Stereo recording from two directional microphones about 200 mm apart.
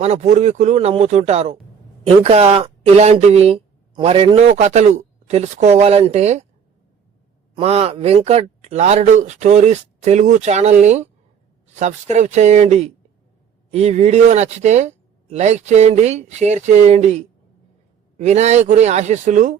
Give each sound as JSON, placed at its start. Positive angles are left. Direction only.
{"t": 0.0, "sound": "speech", "side_deg": -35}
{"t": 7.5, "sound": "speech", "side_deg": -30}